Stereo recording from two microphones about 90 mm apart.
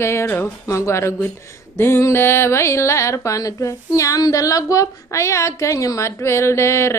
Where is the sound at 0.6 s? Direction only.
35° left (ahead or behind).